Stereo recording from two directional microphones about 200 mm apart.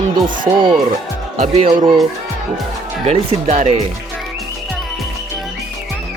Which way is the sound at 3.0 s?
30° right (ahead or behind).